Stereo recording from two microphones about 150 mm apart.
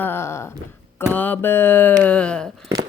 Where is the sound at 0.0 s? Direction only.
15° left (ahead or behind).